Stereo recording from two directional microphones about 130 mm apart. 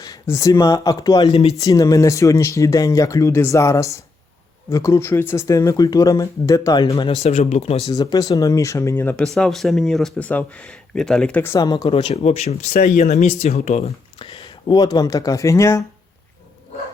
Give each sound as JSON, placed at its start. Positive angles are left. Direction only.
{"t": 0.0, "sound": "speech", "side_deg": 25}
{"t": 1.3, "sound": "speech", "side_deg": 50}
{"t": 1.5, "sound": "speech", "side_deg": 25}
{"t": 7.2, "sound": "speech", "side_deg": 60}
{"t": 7.9, "sound": "speech", "side_deg": 30}
{"t": 9.2, "sound": "speech", "side_deg": 5}
{"t": 11.5, "sound": "speech", "side_deg": 30}
{"t": 11.8, "sound": "speech", "side_deg": 50}
{"t": 12.7, "sound": "speech", "side_deg": 90}
{"t": 14.2, "sound": "speech", "side_deg": 40}